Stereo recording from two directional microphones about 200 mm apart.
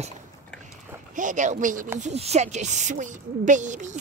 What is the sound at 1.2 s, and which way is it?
Speech, 40° right (ahead or behind).